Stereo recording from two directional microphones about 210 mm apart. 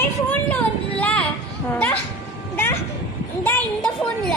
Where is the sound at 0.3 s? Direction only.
5° left (ahead or behind).